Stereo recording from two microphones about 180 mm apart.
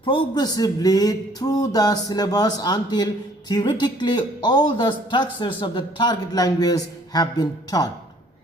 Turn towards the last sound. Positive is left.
turn(degrees=20)  # may be behind; listen again after turning